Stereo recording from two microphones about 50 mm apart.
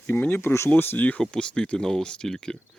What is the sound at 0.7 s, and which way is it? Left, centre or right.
Speech, left.